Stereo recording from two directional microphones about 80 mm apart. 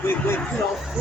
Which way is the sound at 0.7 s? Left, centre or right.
Centre.